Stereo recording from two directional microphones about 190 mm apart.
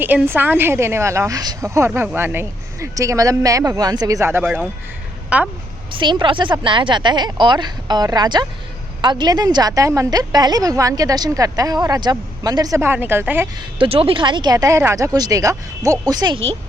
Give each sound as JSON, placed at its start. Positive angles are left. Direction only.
{"t": 0.0, "sound": "a woman's voice", "side_deg": -10}
{"t": 6.0, "sound": "a woman's voice", "side_deg": -25}
{"t": 13.7, "sound": "a woman's voice", "side_deg": -30}